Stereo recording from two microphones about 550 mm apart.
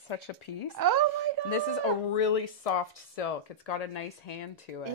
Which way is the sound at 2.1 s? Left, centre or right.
Left.